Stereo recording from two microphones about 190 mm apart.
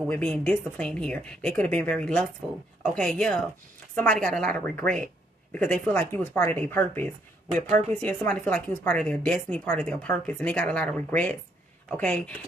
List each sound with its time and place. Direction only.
0.0 s a woman's voice: 5° left (ahead or behind)
7.5 s a woman's voice: 40° right (ahead or behind)
8.0 s a woman's voice: 10° left (ahead or behind)